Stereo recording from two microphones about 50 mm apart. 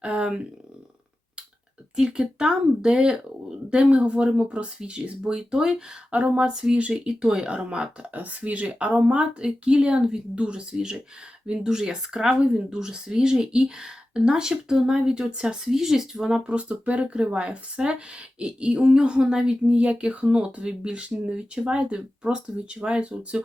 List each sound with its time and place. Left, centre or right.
0.0 s speech: right
2.0 s a woman's voice: centre
6.1 s a woman's voice: right
6.4 s a woman's voice: centre
6.7 s a woman's voice: right
7.0 s a woman's voice: centre
8.1 s a woman's voice: right; by 15.7 s centre
15.7 s a woman's voice: centre
16.3 s a woman's voice: right
19.6 s a woman's voice: right